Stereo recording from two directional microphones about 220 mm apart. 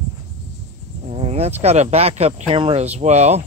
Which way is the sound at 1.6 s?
30° right (ahead or behind).